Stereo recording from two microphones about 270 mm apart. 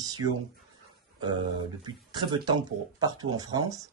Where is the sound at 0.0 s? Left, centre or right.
Centre.